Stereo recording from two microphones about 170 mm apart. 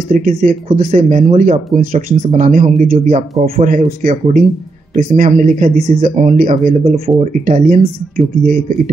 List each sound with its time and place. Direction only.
0.1 s speech: 55° right (ahead or behind)
6.5 s speech: 35° right (ahead or behind)